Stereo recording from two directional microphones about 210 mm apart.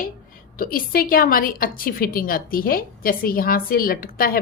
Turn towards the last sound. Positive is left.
turn(degrees=45)  # may be behind; listen again after turning